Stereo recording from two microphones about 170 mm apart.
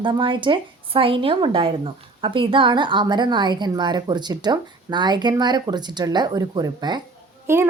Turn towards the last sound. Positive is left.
turn(degrees=-15)  # may be behind; listen again after turning